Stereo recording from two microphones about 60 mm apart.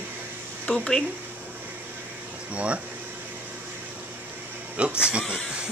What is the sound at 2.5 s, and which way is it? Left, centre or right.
Speech, centre.